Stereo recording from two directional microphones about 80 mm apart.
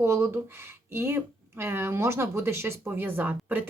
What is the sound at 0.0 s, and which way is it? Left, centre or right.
Speech, right.